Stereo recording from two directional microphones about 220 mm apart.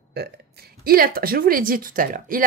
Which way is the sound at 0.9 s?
40° right (ahead or behind).